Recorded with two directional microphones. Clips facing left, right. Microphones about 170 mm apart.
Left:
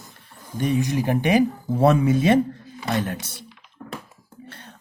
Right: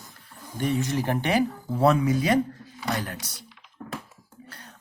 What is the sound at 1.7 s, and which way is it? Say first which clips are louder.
Speech: left 3 dB; 25° left (ahead or behind).